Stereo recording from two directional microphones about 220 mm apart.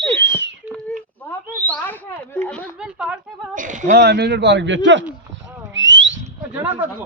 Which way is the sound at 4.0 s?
50° right (ahead or behind).